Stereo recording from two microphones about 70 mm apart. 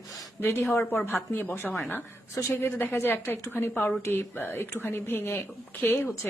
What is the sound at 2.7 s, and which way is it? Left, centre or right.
A woman's voice, left.